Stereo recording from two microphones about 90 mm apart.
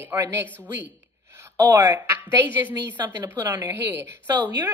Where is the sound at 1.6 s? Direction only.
45° right (ahead or behind).